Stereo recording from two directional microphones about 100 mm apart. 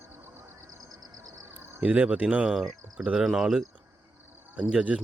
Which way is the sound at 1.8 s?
10° right (ahead or behind).